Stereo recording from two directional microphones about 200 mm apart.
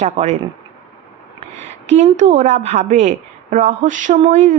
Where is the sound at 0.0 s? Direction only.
35° right (ahead or behind).